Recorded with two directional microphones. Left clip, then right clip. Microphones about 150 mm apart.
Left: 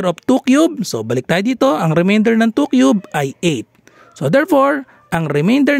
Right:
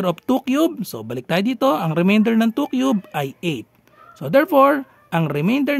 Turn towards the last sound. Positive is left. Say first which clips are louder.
# left 6 dB
turn(degrees=50)  # may be behind; listen again after turning